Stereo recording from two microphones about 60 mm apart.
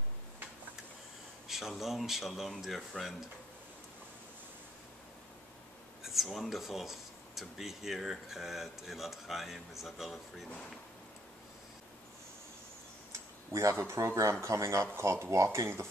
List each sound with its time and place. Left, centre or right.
1.5 s speech: centre
6.0 s speech: centre
13.5 s speech: right
15.0 s speech: right